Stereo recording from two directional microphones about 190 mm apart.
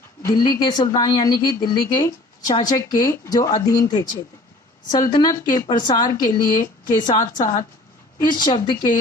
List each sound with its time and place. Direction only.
0.2 s a woman's voice: 20° left (ahead or behind)